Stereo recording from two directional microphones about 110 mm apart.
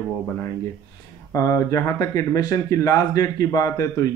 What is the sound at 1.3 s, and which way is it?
Speech, 30° left (ahead or behind).